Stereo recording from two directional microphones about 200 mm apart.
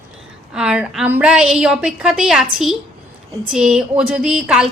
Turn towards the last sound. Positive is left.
turn(degrees=-5)  # may be behind; listen again after turning